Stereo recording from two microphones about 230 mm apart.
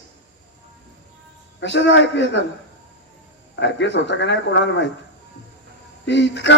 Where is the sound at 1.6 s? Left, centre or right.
Left.